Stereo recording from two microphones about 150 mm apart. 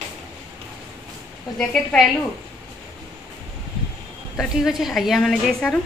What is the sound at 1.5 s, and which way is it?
Speech, 5° left (ahead or behind).